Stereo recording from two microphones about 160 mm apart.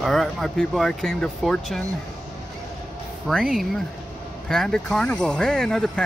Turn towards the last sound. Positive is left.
turn(degrees=5)  # may be behind; listen again after turning